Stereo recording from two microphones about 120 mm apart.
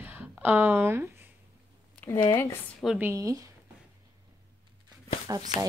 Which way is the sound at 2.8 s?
5° left (ahead or behind).